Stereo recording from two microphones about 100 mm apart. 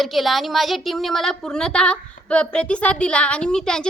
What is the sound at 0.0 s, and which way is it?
A woman's voice, centre (ahead or behind).